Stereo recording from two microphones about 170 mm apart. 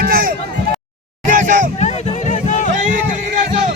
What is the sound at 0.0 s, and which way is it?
Run, 55° right (ahead or behind).